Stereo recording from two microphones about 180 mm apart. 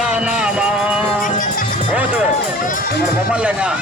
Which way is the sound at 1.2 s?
50° left (ahead or behind).